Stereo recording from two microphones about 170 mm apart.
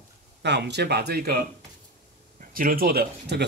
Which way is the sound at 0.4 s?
90° right.